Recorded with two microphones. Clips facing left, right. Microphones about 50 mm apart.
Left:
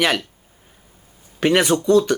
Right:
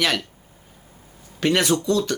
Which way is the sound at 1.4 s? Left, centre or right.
Centre.